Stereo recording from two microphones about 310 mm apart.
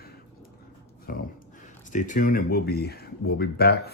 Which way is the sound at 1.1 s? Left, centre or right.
Left.